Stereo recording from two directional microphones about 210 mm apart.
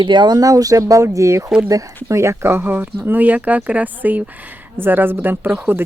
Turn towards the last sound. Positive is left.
turn(degrees=-10)  # may be behind; listen again after turning